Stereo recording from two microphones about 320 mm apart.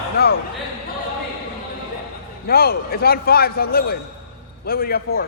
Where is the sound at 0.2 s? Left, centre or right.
Left.